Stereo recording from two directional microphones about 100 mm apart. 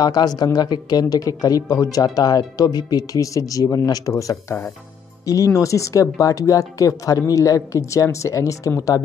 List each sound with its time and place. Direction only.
0.0 s speech: 40° left (ahead or behind)